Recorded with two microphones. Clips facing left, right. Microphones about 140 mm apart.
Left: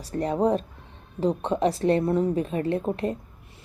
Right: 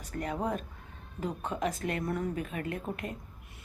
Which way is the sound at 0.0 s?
35° left (ahead or behind).